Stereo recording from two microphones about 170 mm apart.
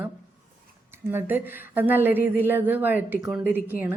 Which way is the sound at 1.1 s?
10° right (ahead or behind).